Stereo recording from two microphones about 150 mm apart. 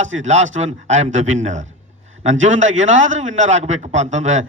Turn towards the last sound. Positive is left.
turn(degrees=-50)  # may be behind; listen again after turning